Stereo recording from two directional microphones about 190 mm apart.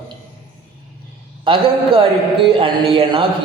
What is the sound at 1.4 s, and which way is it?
A man's voice, 25° right (ahead or behind).